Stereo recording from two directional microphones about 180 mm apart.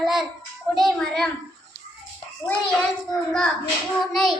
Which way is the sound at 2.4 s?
5° left (ahead or behind).